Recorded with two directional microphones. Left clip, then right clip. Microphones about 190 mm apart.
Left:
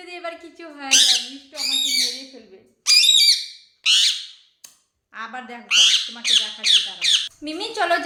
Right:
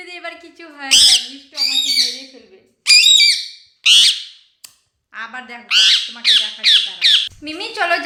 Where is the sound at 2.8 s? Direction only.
20° right (ahead or behind).